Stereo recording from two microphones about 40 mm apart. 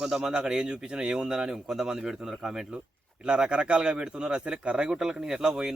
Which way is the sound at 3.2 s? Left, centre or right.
Right.